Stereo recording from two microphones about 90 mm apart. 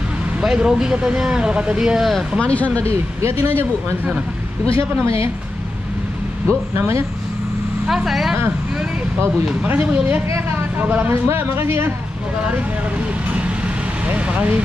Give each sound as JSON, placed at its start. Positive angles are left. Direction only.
{"t": 0.4, "sound": "speech", "side_deg": -10}
{"t": 2.4, "sound": "speech", "side_deg": 15}
{"t": 2.8, "sound": "speech", "side_deg": -30}
{"t": 4.7, "sound": "speech", "side_deg": -30}
{"t": 6.4, "sound": "speech", "side_deg": -30}
{"t": 7.8, "sound": "speech", "side_deg": -5}
{"t": 9.6, "sound": "speech", "side_deg": -20}
{"t": 14.0, "sound": "speech", "side_deg": -15}